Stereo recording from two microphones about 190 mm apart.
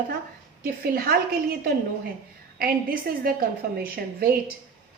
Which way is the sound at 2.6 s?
50° right (ahead or behind).